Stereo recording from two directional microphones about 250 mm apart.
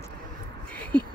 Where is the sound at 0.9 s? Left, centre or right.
Centre.